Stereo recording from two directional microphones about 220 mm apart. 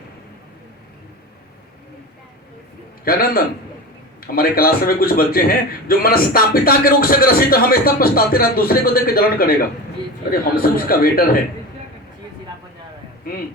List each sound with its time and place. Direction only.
3.0 s a man's voice: 40° left (ahead or behind)
13.3 s a man's voice: 40° left (ahead or behind)